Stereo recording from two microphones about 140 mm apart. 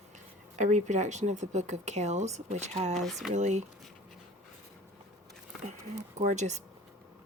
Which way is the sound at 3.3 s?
55° right (ahead or behind).